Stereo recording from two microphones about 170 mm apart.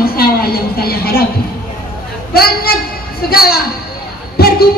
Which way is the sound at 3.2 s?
65° left (ahead or behind).